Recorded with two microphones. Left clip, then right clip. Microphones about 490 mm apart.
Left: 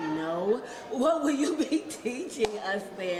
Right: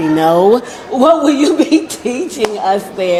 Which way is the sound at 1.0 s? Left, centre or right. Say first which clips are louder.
Right 16 dB; right.